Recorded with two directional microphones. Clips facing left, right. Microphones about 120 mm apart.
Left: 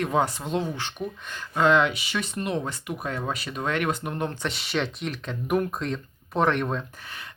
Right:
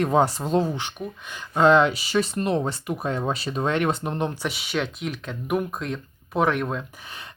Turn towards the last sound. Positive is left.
turn(degrees=-5)  # may be behind; listen again after turning